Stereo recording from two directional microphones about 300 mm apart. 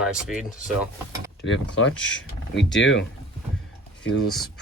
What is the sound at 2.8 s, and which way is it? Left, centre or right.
Speech, left.